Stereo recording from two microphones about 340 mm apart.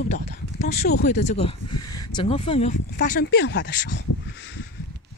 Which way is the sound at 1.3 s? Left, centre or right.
Centre.